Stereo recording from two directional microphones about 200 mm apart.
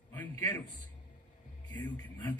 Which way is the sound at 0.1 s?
10° left (ahead or behind).